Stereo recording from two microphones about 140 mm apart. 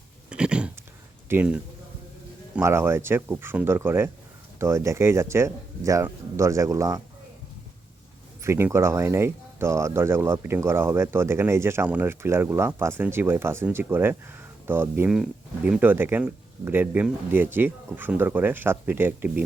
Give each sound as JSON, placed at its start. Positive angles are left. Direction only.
{"t": 0.3, "sound": "a sound", "side_deg": -5}
{"t": 1.3, "sound": "speech", "side_deg": -10}
{"t": 8.4, "sound": "speech", "side_deg": -20}
{"t": 15.1, "sound": "speech", "side_deg": -5}
{"t": 15.8, "sound": "speech", "side_deg": -15}